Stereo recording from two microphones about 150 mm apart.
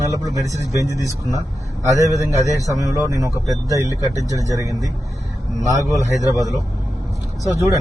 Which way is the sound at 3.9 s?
20° left (ahead or behind).